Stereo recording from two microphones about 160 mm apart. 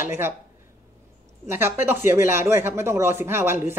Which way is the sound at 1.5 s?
15° right (ahead or behind).